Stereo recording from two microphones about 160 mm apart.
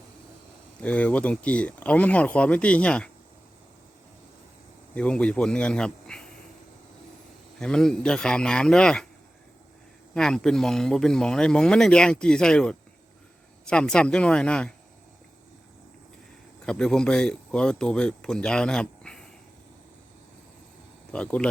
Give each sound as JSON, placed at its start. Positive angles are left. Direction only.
{"t": 0.8, "sound": "speech", "side_deg": 10}
{"t": 4.9, "sound": "speech", "side_deg": 5}
{"t": 7.6, "sound": "speech", "side_deg": 5}
{"t": 10.2, "sound": "speech", "side_deg": 5}
{"t": 16.6, "sound": "speech", "side_deg": 5}
{"t": 21.1, "sound": "speech", "side_deg": 5}